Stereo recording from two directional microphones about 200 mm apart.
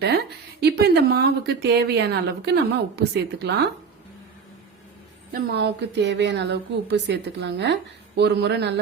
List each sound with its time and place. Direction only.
0.6 s a woman's voice: 50° right (ahead or behind)
5.3 s a woman's voice: 55° right (ahead or behind)